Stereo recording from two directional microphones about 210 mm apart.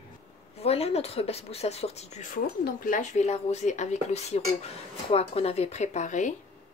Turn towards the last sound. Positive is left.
turn(degrees=35)  # may be behind; listen again after turning